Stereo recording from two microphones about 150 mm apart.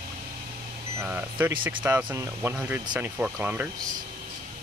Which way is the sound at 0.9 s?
10° right (ahead or behind).